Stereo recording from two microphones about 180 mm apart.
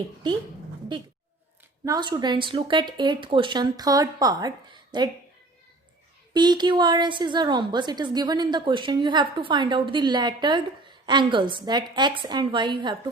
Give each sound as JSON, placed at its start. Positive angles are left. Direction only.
{"t": 1.8, "sound": "a woman's voice", "side_deg": -20}
{"t": 6.3, "sound": "a woman's voice", "side_deg": -25}